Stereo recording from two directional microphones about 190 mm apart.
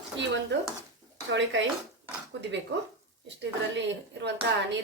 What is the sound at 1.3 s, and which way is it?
Speech, 70° right (ahead or behind).